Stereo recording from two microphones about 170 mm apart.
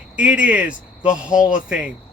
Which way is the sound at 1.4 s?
50° left (ahead or behind).